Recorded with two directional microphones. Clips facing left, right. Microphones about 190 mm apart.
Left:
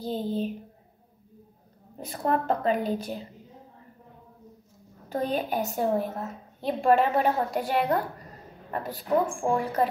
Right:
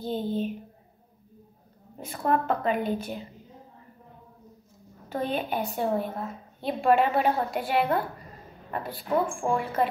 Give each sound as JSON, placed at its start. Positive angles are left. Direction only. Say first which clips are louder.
{"t": 0.0, "sound": "a woman's voice", "louder": "even", "side_deg": 35}
{"t": 2.0, "sound": "a woman's voice", "louder": "right 1 dB", "side_deg": 40}
{"t": 5.1, "sound": "a woman's voice", "louder": "left 1 dB", "side_deg": 40}